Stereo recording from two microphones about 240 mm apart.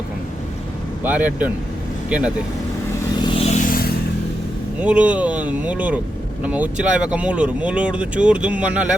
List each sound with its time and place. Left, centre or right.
1.0 s speech: centre
3.2 s vehicle: left
4.8 s speech: centre